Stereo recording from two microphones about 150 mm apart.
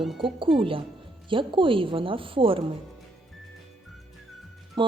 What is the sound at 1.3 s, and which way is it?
A woman's voice, 35° right (ahead or behind).